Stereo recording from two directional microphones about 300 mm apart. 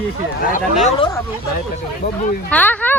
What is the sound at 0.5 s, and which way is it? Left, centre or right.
Speech, left.